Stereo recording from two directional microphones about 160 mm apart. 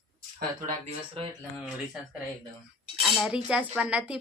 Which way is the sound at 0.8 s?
35° right (ahead or behind).